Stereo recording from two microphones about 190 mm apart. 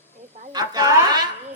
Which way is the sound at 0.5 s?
20° right (ahead or behind).